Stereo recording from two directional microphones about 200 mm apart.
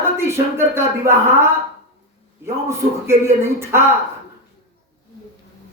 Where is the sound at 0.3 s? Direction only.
10° right (ahead or behind).